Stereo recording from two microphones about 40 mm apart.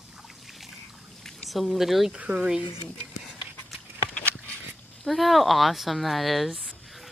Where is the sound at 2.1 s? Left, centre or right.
Right.